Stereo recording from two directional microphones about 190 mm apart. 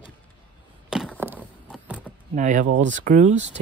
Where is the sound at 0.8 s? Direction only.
Centre (ahead or behind).